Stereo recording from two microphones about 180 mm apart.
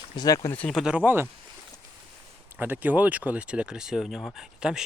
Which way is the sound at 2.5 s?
10° right (ahead or behind).